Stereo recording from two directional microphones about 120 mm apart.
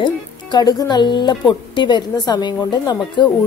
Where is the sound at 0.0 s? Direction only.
35° left (ahead or behind).